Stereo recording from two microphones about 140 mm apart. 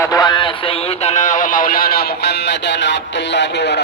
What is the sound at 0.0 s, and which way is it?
Speech, 25° left (ahead or behind).